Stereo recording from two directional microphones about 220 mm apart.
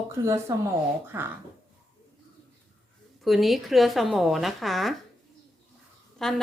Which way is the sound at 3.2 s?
Centre (ahead or behind).